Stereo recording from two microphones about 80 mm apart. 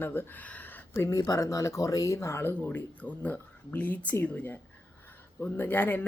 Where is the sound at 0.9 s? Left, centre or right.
Left.